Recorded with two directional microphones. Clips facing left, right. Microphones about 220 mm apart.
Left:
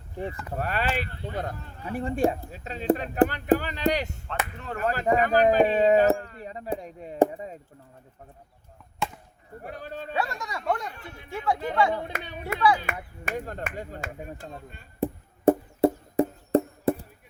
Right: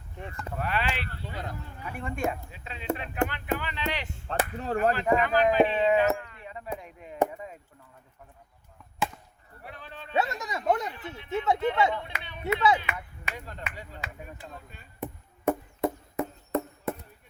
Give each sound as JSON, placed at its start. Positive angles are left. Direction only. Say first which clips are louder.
{"t": 0.5, "sound": "speech", "louder": "left 2 dB", "side_deg": 40}
{"t": 1.9, "sound": "speech", "louder": "left 6 dB", "side_deg": 35}
{"t": 4.3, "sound": "speech", "louder": "right 4 dB", "side_deg": -35}
{"t": 4.8, "sound": "speech", "louder": "left 1 dB", "side_deg": 40}
{"t": 9.0, "sound": "chop", "louder": "even", "side_deg": -5}
{"t": 9.6, "sound": "speech", "louder": "left 8 dB", "side_deg": 45}
{"t": 10.2, "sound": "speech", "louder": "right 3 dB", "side_deg": -20}
{"t": 11.9, "sound": "speech", "louder": "left 5 dB", "side_deg": 40}
{"t": 15.0, "sound": "music", "louder": "left 8 dB", "side_deg": 30}